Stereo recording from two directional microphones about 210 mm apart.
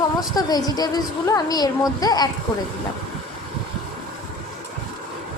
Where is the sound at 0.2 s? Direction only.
20° left (ahead or behind).